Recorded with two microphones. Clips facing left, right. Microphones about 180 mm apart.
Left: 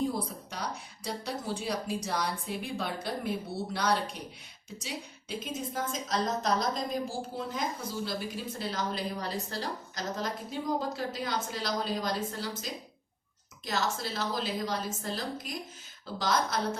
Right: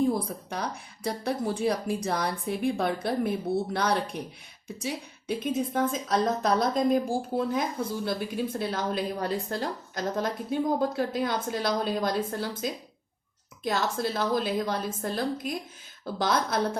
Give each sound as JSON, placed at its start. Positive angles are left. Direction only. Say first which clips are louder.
{"t": 0.1, "sound": "a woman's voice", "louder": "right 6 dB", "side_deg": -55}